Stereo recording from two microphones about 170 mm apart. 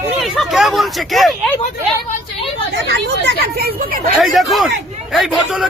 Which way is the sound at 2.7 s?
80° right.